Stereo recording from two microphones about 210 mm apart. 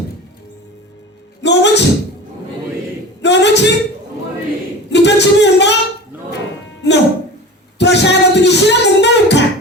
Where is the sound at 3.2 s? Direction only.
55° left (ahead or behind).